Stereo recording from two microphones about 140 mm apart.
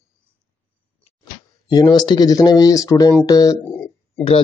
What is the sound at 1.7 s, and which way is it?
Speech, 30° left (ahead or behind).